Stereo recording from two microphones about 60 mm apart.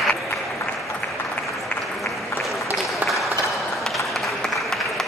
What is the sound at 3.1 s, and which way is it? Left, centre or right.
Applause, centre.